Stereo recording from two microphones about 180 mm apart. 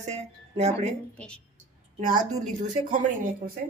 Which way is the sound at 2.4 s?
45° right (ahead or behind).